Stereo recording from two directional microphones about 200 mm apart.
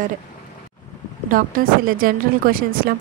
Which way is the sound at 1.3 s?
45° right (ahead or behind).